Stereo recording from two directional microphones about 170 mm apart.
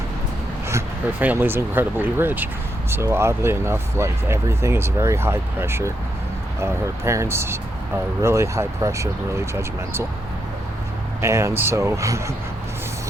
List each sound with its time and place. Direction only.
1.2 s speech: 10° right (ahead or behind)
11.2 s speech: 15° right (ahead or behind)